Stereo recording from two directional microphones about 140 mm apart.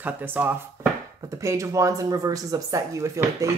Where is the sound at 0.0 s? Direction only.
10° right (ahead or behind).